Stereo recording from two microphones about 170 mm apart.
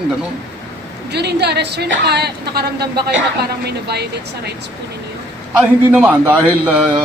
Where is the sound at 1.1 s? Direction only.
75° right (ahead or behind).